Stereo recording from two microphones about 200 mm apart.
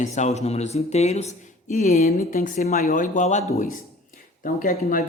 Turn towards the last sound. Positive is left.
turn(degrees=45)  # may be behind; listen again after turning